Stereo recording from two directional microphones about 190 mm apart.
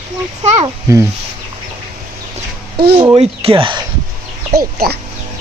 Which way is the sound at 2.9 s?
25° right (ahead or behind).